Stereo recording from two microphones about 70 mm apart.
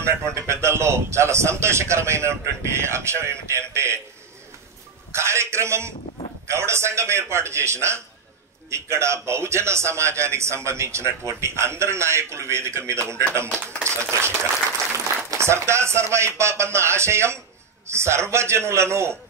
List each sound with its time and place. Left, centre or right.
0.0 s a man's voice: right
5.1 s a man's voice: right